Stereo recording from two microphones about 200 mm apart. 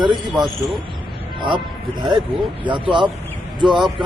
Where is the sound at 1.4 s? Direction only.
25° right (ahead or behind).